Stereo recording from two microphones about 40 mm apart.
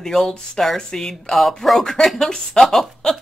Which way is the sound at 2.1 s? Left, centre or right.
Centre.